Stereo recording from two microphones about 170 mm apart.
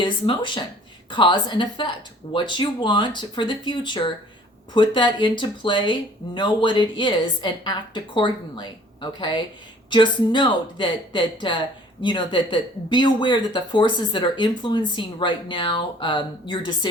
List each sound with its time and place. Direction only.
0.0 s speech: 30° left (ahead or behind)